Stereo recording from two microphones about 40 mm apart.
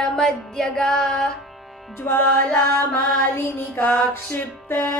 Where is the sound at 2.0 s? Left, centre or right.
Left.